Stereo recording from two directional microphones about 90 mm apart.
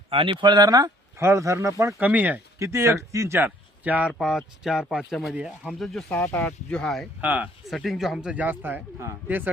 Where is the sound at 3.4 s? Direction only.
20° right (ahead or behind).